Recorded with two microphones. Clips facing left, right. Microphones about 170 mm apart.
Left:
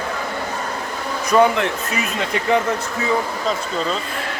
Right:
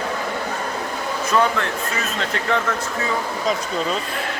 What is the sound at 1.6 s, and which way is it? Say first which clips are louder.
Speech: left 3 dB; 15° left (ahead or behind).